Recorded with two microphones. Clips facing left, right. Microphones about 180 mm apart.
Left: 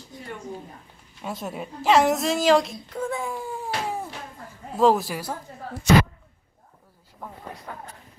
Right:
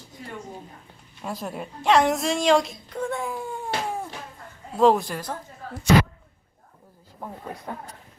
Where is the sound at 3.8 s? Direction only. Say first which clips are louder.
Even; centre (ahead or behind).